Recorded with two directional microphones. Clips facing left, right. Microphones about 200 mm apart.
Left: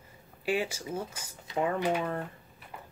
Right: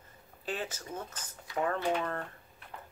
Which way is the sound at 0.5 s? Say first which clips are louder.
Left 7 dB; 10° left (ahead or behind).